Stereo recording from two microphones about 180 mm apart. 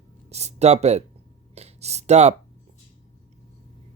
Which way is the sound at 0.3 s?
35° right (ahead or behind).